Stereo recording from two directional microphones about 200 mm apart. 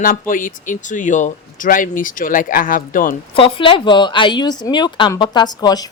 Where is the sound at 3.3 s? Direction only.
25° left (ahead or behind).